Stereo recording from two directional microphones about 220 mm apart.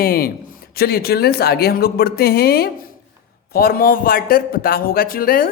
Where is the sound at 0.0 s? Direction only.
40° left (ahead or behind).